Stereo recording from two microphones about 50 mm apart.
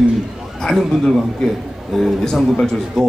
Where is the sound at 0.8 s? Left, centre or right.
Centre.